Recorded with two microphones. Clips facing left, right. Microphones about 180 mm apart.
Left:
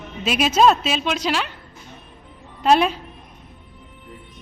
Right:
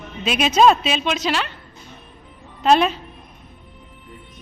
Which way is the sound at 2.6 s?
10° left (ahead or behind).